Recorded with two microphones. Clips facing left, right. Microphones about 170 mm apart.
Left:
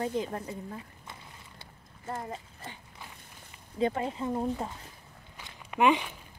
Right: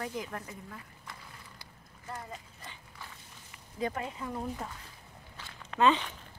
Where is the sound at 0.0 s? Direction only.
25° left (ahead or behind).